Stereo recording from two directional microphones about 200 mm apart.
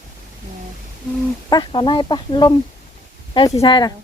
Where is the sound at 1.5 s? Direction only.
25° left (ahead or behind).